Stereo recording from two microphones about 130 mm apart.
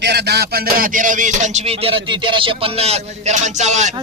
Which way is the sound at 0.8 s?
90° right.